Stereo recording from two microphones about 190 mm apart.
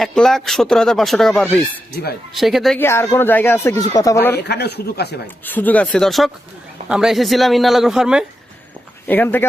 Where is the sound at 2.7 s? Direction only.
10° left (ahead or behind).